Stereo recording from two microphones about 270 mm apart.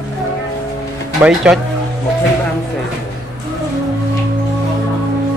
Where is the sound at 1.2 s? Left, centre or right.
Centre.